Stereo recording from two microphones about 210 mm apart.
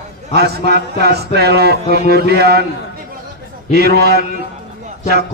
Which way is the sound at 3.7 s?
50° right (ahead or behind).